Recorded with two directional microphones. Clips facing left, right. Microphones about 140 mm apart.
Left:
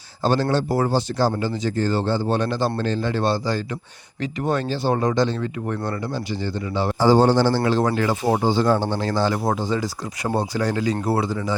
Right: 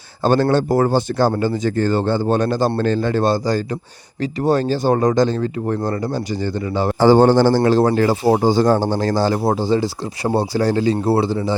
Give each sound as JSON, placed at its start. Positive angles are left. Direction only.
{"t": 0.2, "sound": "speech", "side_deg": -55}
{"t": 7.0, "sound": "speech", "side_deg": -60}